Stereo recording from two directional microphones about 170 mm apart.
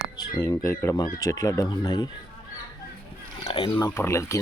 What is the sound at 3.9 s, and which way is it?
Speech, 15° left (ahead or behind).